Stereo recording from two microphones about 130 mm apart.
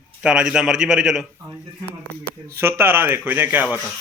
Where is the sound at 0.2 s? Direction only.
5° right (ahead or behind).